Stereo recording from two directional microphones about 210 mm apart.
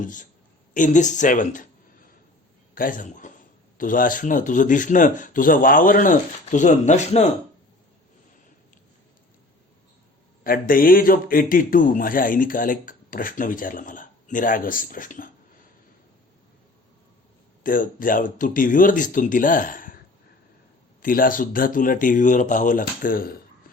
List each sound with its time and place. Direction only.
0.0 s a man's voice: 35° left (ahead or behind)
2.7 s a man's voice: 40° left (ahead or behind)
10.4 s a man's voice: 40° left (ahead or behind)
17.6 s a man's voice: 40° left (ahead or behind)
21.0 s a man's voice: 40° left (ahead or behind)